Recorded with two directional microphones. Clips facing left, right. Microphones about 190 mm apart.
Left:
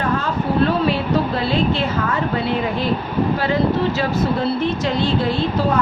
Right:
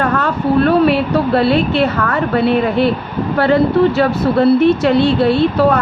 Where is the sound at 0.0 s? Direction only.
65° right (ahead or behind).